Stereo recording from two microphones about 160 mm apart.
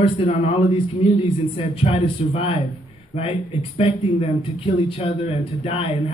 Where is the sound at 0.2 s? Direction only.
40° left (ahead or behind).